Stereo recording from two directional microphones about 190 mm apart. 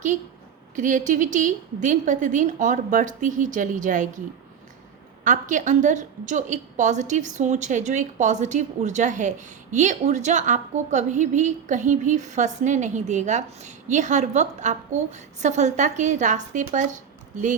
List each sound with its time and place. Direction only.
0.8 s a woman's voice: 40° right (ahead or behind)
5.2 s a woman's voice: 40° right (ahead or behind)